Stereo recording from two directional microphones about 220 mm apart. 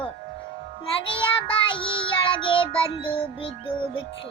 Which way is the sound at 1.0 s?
25° left (ahead or behind).